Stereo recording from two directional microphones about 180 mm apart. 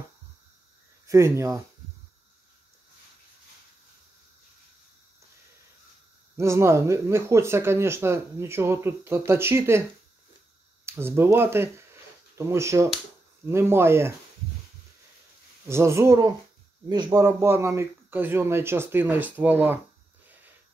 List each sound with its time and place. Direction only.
1.0 s speech: 15° right (ahead or behind)
6.3 s speech: 15° right (ahead or behind)
10.9 s speech: 15° right (ahead or behind)
15.7 s speech: 15° right (ahead or behind)